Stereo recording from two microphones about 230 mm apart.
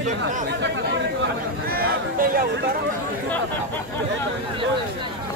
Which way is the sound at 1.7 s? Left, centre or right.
Right.